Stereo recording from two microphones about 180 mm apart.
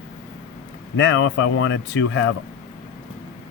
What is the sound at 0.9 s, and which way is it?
Speech, 90° left.